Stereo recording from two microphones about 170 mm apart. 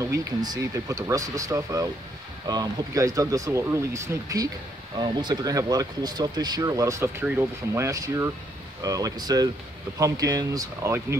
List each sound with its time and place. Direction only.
0.0 s speech: 20° right (ahead or behind)